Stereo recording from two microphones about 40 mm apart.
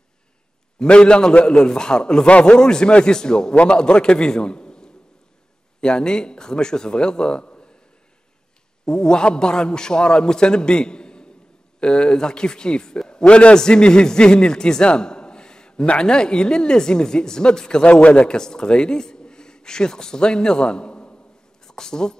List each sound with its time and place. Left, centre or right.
0.7 s a man's voice: left
8.8 s a man's voice: centre
18.0 s a man's voice: left
18.3 s a man's voice: centre